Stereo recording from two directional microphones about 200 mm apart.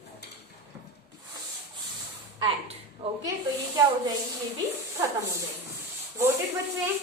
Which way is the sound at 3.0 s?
30° right (ahead or behind).